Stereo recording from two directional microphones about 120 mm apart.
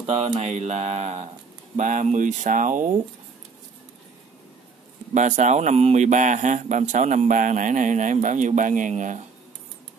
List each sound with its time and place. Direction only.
0.0 s mantra: 60° right (ahead or behind)
1.8 s speech: 90° right
5.1 s speech: 85° right